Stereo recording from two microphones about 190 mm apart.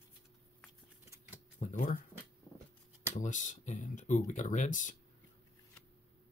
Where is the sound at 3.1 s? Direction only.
40° left (ahead or behind).